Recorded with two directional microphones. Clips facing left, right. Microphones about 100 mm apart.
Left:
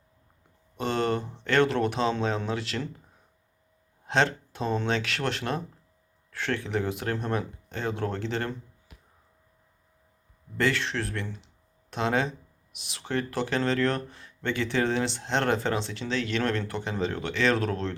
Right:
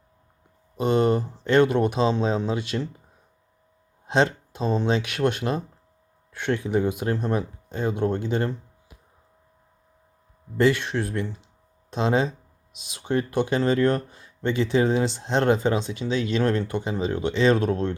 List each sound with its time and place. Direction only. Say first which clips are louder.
0.8 s speech: right 6 dB; 20° right (ahead or behind)
4.0 s speech: right 3 dB; 20° right (ahead or behind)
10.6 s speech: right 6 dB; 20° right (ahead or behind)